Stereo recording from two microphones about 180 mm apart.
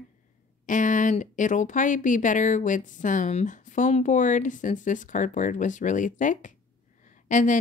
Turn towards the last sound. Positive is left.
turn(degrees=45)  # may be behind; listen again after turning